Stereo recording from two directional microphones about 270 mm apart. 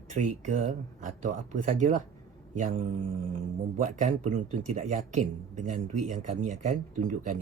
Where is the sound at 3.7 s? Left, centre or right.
Right.